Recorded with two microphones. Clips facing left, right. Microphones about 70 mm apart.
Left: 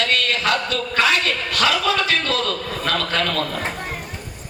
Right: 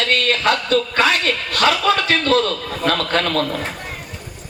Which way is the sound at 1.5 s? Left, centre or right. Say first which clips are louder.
Right 3 dB; right.